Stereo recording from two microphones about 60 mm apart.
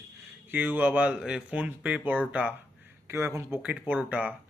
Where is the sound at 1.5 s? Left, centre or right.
Right.